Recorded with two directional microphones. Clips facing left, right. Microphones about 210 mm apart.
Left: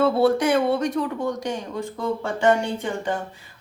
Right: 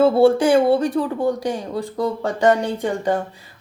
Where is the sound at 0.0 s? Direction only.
30° right (ahead or behind).